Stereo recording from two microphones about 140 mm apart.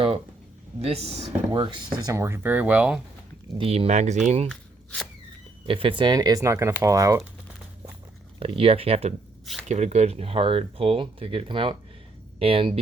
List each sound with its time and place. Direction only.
0.8 s speech: 45° right (ahead or behind)
1.5 s speech: 35° right (ahead or behind)
2.1 s speech: 20° right (ahead or behind)
3.6 s speech: 45° right (ahead or behind)
4.4 s shuffling cards: 5° left (ahead or behind)
5.6 s speech: 40° right (ahead or behind); by 7.2 s 25° right (ahead or behind)
8.4 s speech: 40° right (ahead or behind)